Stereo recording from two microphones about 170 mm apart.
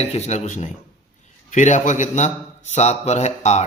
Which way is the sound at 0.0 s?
40° left (ahead or behind).